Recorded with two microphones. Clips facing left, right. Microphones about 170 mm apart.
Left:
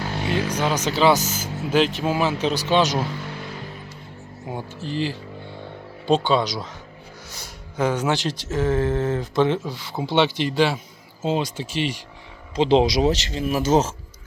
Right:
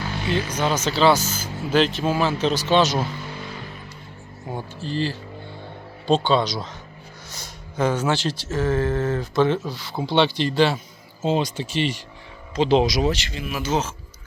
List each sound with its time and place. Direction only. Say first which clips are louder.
0.0 s music: left 1 dB; 45° left (ahead or behind)
0.6 s speech: right 1 dB; 15° left (ahead or behind)
4.4 s speech: even; 15° left (ahead or behind)
12.5 s speech: left 1 dB; 25° left (ahead or behind); by 13.9 s 45° left (ahead or behind)